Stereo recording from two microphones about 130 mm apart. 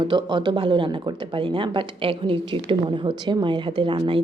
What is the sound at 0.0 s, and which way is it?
Speech, 35° right (ahead or behind).